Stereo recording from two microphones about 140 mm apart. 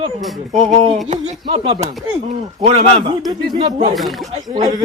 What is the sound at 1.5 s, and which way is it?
Speech, 45° right (ahead or behind).